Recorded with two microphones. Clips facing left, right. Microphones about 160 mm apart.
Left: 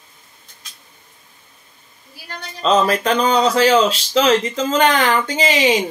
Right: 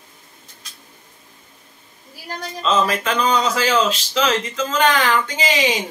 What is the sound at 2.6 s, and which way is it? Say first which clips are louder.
Speech: left 4 dB; 40° left (ahead or behind).